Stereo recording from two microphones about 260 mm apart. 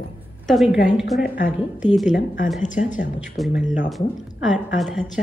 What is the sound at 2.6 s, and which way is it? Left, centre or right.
Speech, left.